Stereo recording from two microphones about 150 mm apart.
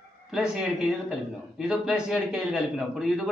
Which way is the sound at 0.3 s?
5° right (ahead or behind).